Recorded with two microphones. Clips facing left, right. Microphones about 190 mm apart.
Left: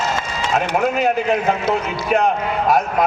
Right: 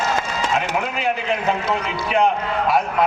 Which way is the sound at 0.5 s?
40° left (ahead or behind).